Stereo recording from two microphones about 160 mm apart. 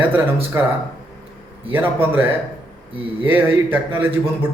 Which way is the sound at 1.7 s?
15° right (ahead or behind).